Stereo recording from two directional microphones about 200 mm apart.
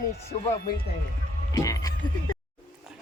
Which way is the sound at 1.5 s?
15° left (ahead or behind).